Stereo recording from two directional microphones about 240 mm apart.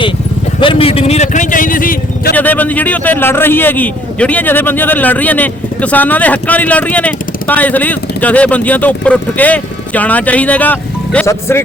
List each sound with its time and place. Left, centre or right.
0.6 s vehicle: left
2.3 s a man's voice: centre